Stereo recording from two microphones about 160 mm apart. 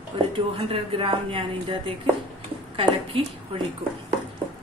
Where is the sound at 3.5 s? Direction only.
35° right (ahead or behind).